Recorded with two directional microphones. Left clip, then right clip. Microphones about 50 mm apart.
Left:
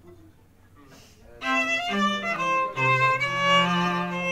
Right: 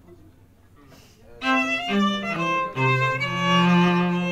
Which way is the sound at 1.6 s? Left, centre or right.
Centre.